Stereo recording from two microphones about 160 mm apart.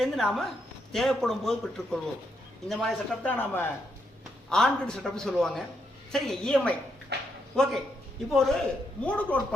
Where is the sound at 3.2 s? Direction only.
10° left (ahead or behind).